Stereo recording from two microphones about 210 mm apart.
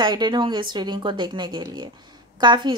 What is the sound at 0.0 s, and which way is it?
A woman's voice, 20° right (ahead or behind).